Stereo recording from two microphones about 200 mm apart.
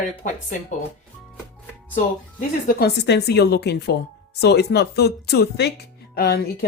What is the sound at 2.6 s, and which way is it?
Speech, 50° left (ahead or behind).